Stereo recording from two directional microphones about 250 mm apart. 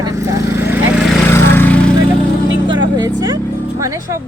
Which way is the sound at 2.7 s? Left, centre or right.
Centre.